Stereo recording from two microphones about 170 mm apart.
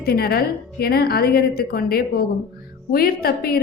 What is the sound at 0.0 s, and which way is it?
A woman's voice, 65° left (ahead or behind).